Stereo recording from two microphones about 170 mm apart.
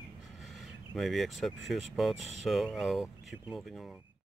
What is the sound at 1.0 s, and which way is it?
Speech, centre (ahead or behind).